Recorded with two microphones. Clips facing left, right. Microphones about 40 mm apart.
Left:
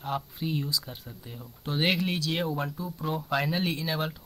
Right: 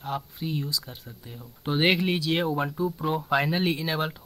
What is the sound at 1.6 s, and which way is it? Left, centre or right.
Speech, centre.